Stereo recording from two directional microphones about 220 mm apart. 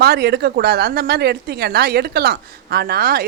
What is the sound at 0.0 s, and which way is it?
Speech, 45° right (ahead or behind).